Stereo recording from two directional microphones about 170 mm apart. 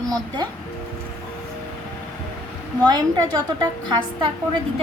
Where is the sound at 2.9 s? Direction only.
25° right (ahead or behind).